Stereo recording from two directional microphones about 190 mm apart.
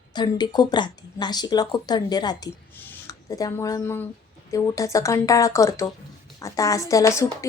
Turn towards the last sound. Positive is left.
turn(degrees=15)  # may be behind; listen again after turning